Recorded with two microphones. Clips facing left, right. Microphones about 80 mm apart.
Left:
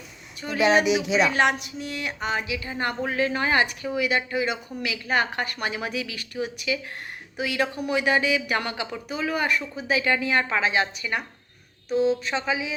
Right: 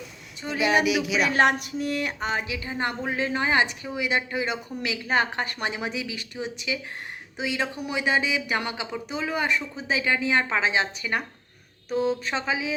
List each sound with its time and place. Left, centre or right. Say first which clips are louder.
0.9 s speech: left 2 dB; left
1.3 s a woman's voice: right 1 dB; right
11.9 s speech: left 3 dB; right
12.3 s a woman's voice: left 1 dB; right